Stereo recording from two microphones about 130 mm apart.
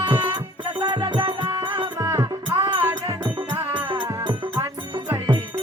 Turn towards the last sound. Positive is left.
turn(degrees=-35)  # may be behind; listen again after turning